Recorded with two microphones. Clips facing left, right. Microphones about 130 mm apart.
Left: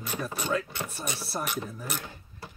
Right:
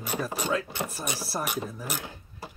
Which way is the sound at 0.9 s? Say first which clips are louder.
Right 2 dB; 10° right (ahead or behind).